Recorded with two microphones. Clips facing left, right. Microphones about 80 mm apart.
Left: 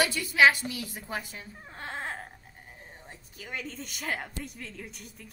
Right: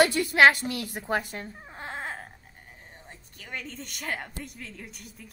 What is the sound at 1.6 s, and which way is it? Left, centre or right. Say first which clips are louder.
Crying: left 4 dB; centre.